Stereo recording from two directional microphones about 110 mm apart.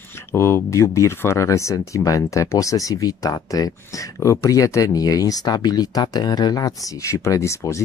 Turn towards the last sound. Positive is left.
turn(degrees=25)  # may be behind; listen again after turning